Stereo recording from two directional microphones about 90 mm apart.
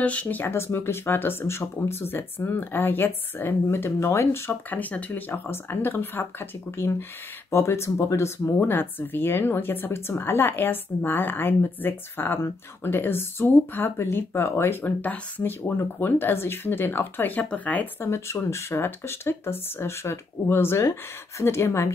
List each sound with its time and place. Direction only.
0.0 s speech: 15° left (ahead or behind)
18.1 s speech: 30° left (ahead or behind)